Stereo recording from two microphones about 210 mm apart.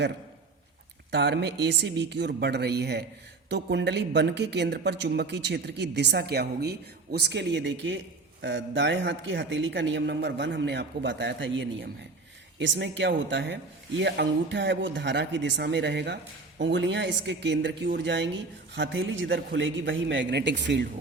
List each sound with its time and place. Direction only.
1.1 s a woman's voice: 55° right (ahead or behind)